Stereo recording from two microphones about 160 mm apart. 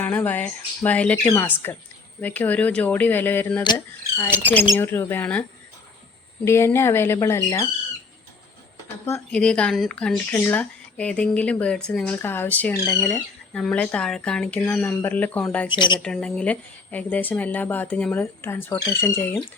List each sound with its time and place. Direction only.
0.0 s speech: 10° left (ahead or behind)
4.7 s speech: 15° left (ahead or behind)
9.0 s speech: 15° left (ahead or behind)
9.4 s speech: 5° left (ahead or behind)
15.7 s a woman's voice: 30° left (ahead or behind)
16.0 s speech: 5° left (ahead or behind)